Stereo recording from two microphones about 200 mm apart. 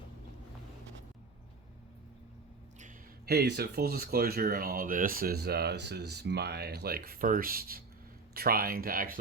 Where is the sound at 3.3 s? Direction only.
55° right (ahead or behind).